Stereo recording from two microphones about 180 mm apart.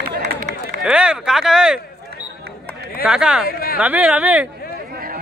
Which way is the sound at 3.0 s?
5° right (ahead or behind).